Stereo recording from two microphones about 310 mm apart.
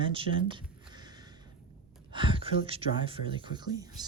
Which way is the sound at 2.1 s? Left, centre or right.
Centre.